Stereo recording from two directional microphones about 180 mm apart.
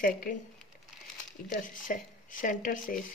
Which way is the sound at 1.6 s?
50° left (ahead or behind).